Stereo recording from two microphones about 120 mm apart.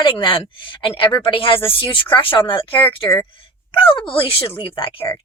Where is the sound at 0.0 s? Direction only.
45° left (ahead or behind).